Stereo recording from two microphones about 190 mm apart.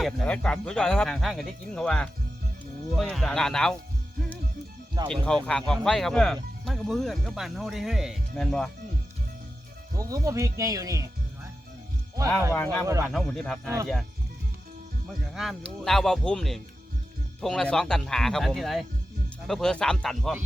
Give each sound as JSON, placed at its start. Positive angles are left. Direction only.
{"t": 0.0, "sound": "speech", "side_deg": 5}
{"t": 5.0, "sound": "speech", "side_deg": 5}
{"t": 10.0, "sound": "speech", "side_deg": -15}
{"t": 12.5, "sound": "speech", "side_deg": 10}
{"t": 12.8, "sound": "speech", "side_deg": -15}
{"t": 13.1, "sound": "speech", "side_deg": 0}
{"t": 15.4, "sound": "speech", "side_deg": 0}